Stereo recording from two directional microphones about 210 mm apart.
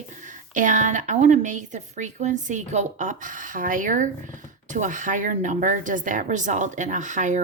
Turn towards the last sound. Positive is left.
turn(degrees=-35)  # may be behind; listen again after turning